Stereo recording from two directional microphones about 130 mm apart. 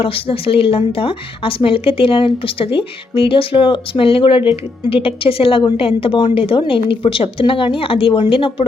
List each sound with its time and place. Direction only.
0.0 s speech: 45° left (ahead or behind)